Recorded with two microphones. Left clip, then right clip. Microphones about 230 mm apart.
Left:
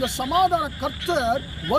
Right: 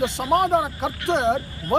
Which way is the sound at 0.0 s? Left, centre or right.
Centre.